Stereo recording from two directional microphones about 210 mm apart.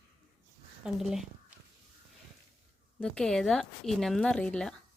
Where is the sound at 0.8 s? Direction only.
Centre (ahead or behind).